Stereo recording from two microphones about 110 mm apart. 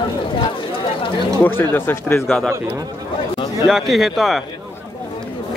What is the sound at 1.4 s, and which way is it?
Speech, 20° left (ahead or behind).